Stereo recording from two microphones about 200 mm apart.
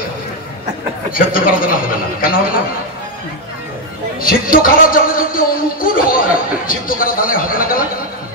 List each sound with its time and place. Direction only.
1.1 s a man's voice: 45° left (ahead or behind)
4.2 s a man's voice: 45° left (ahead or behind)